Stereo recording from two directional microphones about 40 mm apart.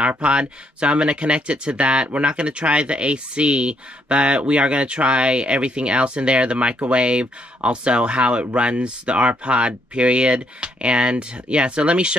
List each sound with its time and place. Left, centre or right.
0.2 s speech: right